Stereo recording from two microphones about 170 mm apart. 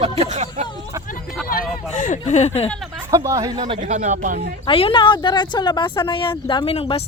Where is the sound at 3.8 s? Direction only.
45° right (ahead or behind).